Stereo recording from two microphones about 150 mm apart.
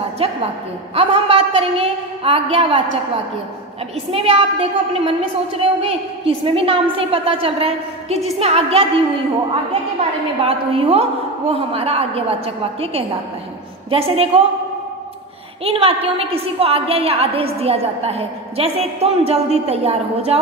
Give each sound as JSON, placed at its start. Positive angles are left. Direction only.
{"t": 0.2, "sound": "a woman's voice", "side_deg": -40}
{"t": 4.1, "sound": "a woman's voice", "side_deg": -40}
{"t": 10.4, "sound": "a woman's voice", "side_deg": -40}
{"t": 15.6, "sound": "a woman's voice", "side_deg": -40}